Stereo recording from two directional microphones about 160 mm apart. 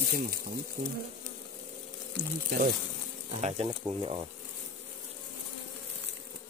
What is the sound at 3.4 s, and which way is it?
Speech, 40° right (ahead or behind).